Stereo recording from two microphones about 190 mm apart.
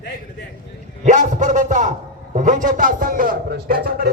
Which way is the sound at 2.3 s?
45° right (ahead or behind).